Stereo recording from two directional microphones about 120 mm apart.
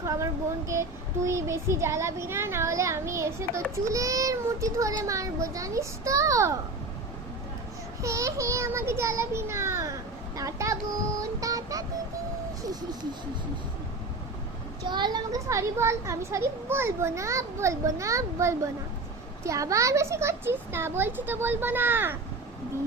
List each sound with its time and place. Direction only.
0.0 s a child's voice: 25° right (ahead or behind)
8.0 s a child's voice: 25° right (ahead or behind)
11.2 s child singing: 30° right (ahead or behind)
14.8 s a child's voice: 40° right (ahead or behind)
15.4 s a child's voice: 25° right (ahead or behind)